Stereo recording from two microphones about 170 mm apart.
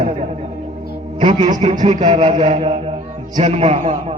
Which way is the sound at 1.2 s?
45° right (ahead or behind).